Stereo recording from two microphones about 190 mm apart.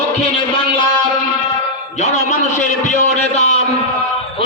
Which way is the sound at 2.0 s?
40° left (ahead or behind).